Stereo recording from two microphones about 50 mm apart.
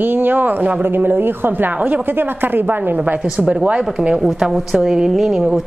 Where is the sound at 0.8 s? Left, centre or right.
Right.